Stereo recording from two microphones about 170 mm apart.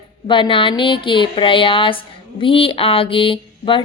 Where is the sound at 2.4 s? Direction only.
30° left (ahead or behind).